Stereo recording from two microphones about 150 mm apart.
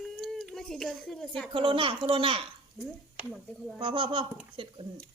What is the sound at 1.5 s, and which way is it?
Speech, 35° right (ahead or behind).